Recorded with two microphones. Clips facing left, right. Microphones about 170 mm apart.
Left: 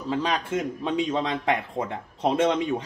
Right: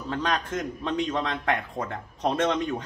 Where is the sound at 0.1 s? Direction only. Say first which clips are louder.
Left 2 dB; 5° left (ahead or behind).